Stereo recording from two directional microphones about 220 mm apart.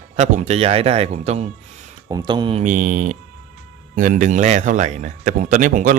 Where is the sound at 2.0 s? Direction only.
20° right (ahead or behind).